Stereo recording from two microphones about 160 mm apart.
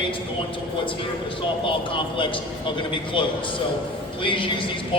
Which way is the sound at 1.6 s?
30° left (ahead or behind).